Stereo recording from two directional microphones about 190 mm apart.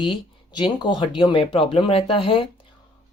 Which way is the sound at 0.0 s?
25° left (ahead or behind).